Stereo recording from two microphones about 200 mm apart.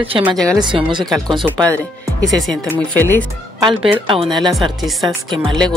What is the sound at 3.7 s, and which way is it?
Speech, 25° right (ahead or behind).